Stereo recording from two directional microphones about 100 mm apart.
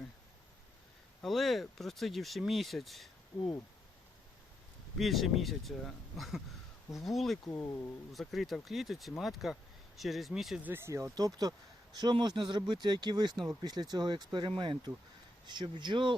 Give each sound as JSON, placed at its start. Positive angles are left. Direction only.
{"t": 1.2, "sound": "speech", "side_deg": 0}
{"t": 4.9, "sound": "speech", "side_deg": 0}
{"t": 10.6, "sound": "speech", "side_deg": -20}
{"t": 11.1, "sound": "speech", "side_deg": -40}
{"t": 13.3, "sound": "speech", "side_deg": 0}
{"t": 13.6, "sound": "speech", "side_deg": -45}